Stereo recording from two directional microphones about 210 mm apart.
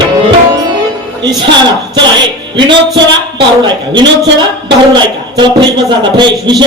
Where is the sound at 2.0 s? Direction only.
20° right (ahead or behind).